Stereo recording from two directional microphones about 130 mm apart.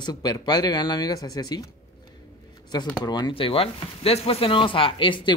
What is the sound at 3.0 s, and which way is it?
Speech, 35° left (ahead or behind).